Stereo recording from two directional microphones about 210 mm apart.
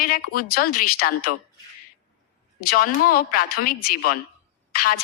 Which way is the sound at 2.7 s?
45° left (ahead or behind).